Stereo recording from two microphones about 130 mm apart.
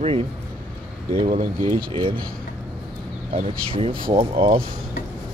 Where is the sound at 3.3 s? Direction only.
45° right (ahead or behind).